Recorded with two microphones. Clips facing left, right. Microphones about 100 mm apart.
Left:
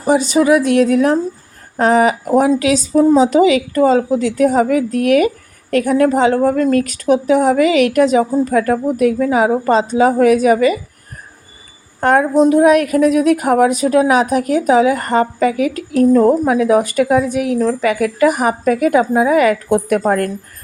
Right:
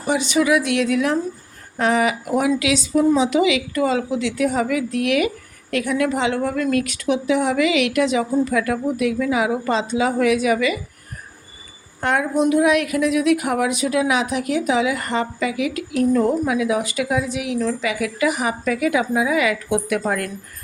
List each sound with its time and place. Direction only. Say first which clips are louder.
0.0 s a woman's voice: left 6 dB; 40° left (ahead or behind)
11.9 s a woman's voice: left 8 dB; 45° left (ahead or behind)